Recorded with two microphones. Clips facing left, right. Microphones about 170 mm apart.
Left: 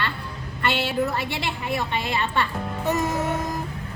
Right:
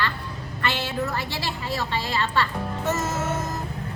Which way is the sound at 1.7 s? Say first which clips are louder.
Left 2 dB; 20° left (ahead or behind).